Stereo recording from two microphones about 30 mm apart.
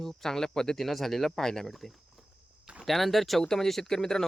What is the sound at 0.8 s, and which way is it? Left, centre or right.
Speech, centre.